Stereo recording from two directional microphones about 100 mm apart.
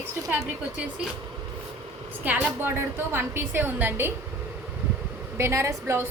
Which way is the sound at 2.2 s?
20° right (ahead or behind).